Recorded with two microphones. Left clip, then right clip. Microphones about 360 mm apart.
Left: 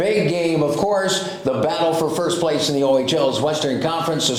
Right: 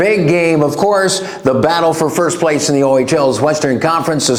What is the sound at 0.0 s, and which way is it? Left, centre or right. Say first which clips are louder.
A man's voice: right 7 dB; right.